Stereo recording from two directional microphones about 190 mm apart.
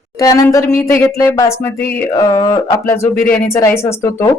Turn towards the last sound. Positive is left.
turn(degrees=15)  # may be behind; listen again after turning